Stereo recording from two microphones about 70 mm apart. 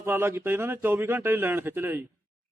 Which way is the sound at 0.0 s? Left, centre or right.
Right.